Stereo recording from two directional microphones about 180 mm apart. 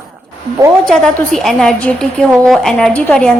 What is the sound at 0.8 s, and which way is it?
A woman's voice, 5° left (ahead or behind).